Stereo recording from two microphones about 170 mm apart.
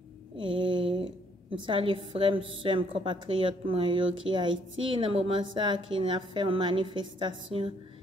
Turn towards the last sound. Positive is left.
turn(degrees=-30)  # may be behind; listen again after turning